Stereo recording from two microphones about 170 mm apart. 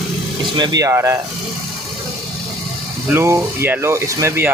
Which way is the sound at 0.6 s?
20° right (ahead or behind).